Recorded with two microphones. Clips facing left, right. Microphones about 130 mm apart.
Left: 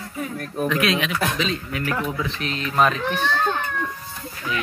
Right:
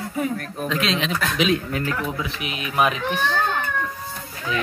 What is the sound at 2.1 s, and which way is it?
Speech, 10° right (ahead or behind).